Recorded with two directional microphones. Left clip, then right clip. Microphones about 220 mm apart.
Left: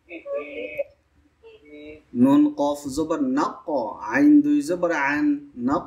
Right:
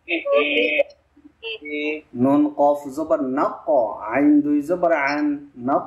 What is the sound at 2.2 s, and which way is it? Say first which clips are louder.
Speech: even; 60° left (ahead or behind).